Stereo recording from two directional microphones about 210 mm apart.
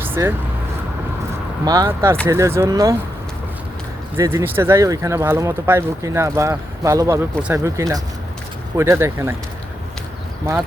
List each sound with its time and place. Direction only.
0.0 s vehicle: 10° right (ahead or behind)
1.6 s speech: 20° right (ahead or behind)
4.2 s speech: 15° right (ahead or behind)